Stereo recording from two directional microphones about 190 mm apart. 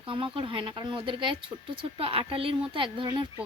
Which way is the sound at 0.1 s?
25° right (ahead or behind).